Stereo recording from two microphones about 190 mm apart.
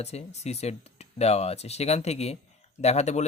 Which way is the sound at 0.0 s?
35° left (ahead or behind).